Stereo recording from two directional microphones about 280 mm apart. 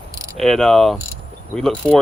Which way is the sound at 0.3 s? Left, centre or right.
Centre.